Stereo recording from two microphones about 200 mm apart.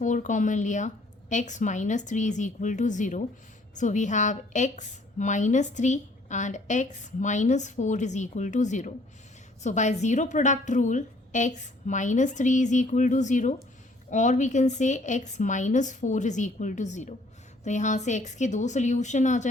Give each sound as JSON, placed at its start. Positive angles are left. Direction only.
{"t": 0.0, "sound": "a woman's voice", "side_deg": 40}